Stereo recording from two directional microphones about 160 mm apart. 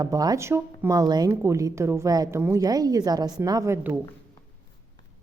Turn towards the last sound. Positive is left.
turn(degrees=-15)  # may be behind; listen again after turning